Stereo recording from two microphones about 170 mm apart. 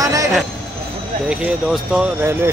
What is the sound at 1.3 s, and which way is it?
Speech, 5° right (ahead or behind).